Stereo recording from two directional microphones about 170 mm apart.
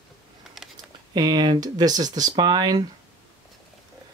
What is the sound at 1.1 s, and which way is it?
Speech, 25° right (ahead or behind).